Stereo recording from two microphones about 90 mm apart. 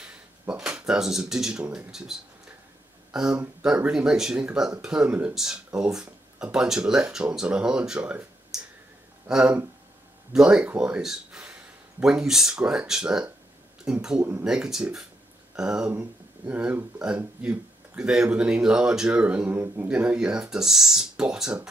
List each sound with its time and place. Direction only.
0.0 s speech: 10° right (ahead or behind)
8.5 s clicking: 5° right (ahead or behind)
9.3 s speech: 10° right (ahead or behind)